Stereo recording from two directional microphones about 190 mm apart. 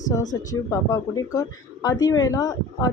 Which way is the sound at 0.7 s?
20° left (ahead or behind).